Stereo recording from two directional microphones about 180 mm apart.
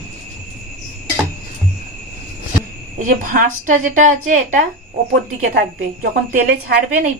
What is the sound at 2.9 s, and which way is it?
A woman's voice, 50° right (ahead or behind).